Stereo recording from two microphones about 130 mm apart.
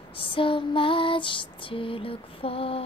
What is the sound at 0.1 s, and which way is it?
Female singing, 40° left (ahead or behind).